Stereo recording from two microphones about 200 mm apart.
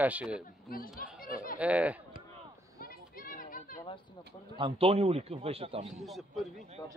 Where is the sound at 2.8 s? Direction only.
45° left (ahead or behind).